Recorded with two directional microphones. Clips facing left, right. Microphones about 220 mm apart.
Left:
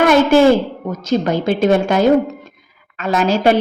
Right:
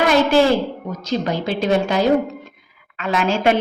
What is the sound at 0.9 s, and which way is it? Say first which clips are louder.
A woman's voice: left 7 dB; 50° left (ahead or behind).